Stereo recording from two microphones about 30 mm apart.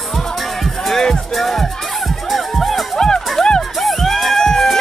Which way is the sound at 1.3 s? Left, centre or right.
Centre.